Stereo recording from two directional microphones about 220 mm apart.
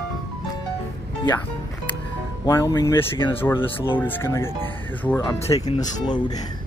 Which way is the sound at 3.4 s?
10° left (ahead or behind).